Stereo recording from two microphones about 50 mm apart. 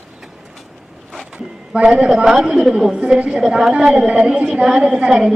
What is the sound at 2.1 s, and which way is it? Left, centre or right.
A woman's voice, centre.